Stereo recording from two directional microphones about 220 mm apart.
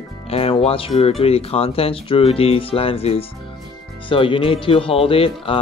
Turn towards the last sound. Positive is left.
turn(degrees=25)  # may be behind; listen again after turning